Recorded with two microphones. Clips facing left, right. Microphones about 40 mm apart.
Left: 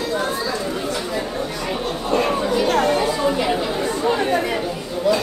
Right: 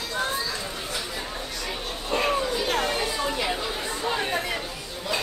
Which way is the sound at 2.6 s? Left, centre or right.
Centre.